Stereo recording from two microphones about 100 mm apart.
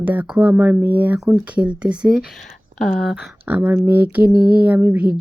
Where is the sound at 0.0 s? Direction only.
15° right (ahead or behind).